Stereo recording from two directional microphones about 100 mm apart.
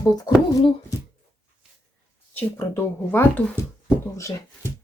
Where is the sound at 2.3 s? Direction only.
20° left (ahead or behind).